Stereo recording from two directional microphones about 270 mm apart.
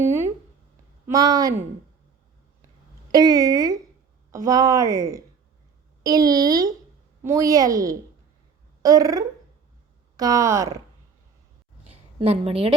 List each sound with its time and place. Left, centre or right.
0.0 s a sound: centre
1.0 s a woman's voice: centre
3.1 s a woman's voice: centre
11.9 s a woman's voice: right